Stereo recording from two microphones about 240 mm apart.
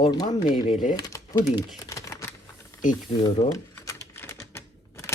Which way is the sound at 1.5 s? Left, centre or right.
Centre.